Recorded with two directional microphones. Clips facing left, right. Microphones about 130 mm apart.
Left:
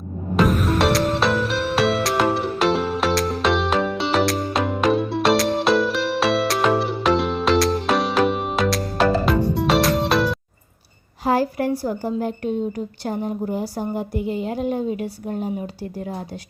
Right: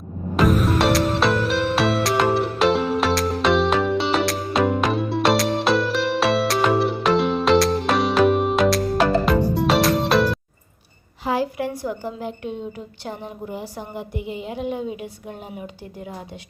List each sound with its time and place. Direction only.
0.3 s music: centre (ahead or behind)
11.3 s a woman's voice: 40° left (ahead or behind)